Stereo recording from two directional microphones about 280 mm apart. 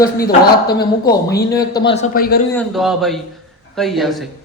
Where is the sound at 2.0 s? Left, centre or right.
Left.